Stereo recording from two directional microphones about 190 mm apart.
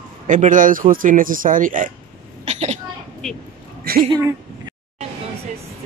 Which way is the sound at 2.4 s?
35° right (ahead or behind).